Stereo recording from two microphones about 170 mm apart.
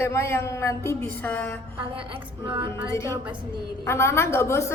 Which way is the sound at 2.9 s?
15° left (ahead or behind).